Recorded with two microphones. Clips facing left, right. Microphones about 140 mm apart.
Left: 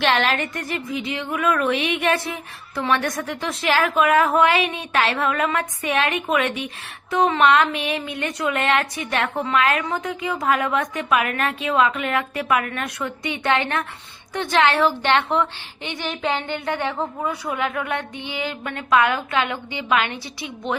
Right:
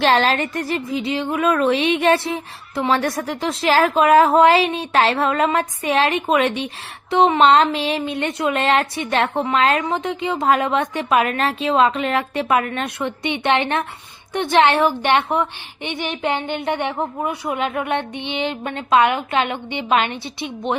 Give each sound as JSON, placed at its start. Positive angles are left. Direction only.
{"t": 0.0, "sound": "speech", "side_deg": -35}